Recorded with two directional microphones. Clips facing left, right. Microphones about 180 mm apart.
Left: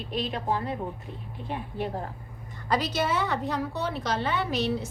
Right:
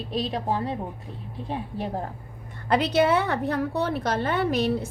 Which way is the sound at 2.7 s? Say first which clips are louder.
Right 6 dB; 60° right (ahead or behind).